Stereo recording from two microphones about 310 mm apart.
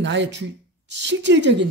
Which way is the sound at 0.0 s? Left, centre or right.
Right.